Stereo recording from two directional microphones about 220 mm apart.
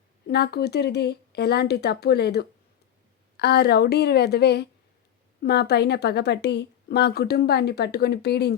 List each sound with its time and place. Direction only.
0.3 s a woman's voice: 45° left (ahead or behind)